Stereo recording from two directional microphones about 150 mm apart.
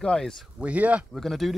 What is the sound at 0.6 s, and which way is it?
Speech, 10° right (ahead or behind).